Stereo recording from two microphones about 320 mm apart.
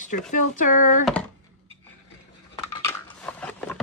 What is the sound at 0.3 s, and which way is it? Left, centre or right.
Speech, left.